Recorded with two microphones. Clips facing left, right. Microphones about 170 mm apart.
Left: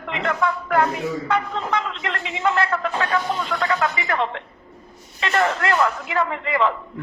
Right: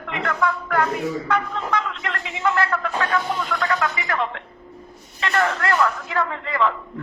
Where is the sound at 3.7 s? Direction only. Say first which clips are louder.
Left 1 dB; 25° left (ahead or behind).